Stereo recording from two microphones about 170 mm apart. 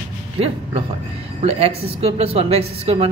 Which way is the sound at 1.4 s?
40° right (ahead or behind).